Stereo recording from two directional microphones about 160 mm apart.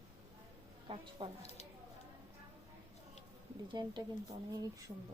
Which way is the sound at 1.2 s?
30° right (ahead or behind).